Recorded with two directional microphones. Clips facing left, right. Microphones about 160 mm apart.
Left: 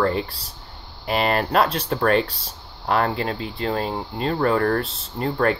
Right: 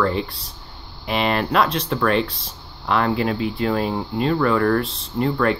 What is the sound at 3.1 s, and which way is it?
Speech, 30° left (ahead or behind).